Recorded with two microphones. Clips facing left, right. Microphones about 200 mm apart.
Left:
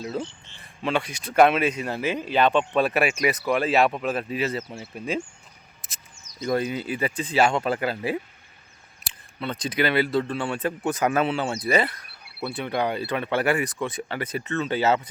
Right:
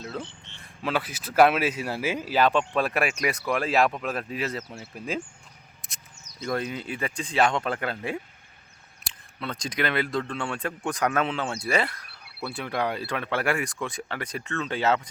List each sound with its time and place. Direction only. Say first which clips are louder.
0.0 s speech: left 5 dB; 10° left (ahead or behind)
0.3 s speech: right 1 dB; 65° right (ahead or behind)
0.6 s speech: left 2 dB; 5° right (ahead or behind)
5.8 s a sound: even; centre (ahead or behind)
6.4 s speech: left 4 dB; 5° left (ahead or behind)